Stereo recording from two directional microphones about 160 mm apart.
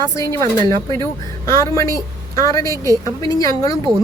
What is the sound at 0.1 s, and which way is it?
Speech, 20° left (ahead or behind).